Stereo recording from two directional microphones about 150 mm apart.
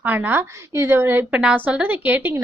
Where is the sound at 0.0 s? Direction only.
10° right (ahead or behind).